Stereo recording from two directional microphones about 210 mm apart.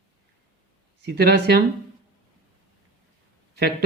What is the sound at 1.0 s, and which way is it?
Speech, 50° right (ahead or behind).